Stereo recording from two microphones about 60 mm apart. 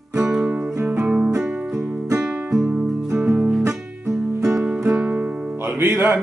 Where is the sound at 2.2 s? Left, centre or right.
Centre.